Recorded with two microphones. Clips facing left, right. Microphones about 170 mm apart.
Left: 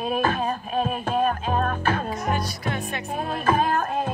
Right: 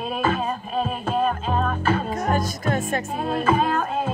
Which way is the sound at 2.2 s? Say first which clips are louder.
Right 6 dB; 45° right (ahead or behind).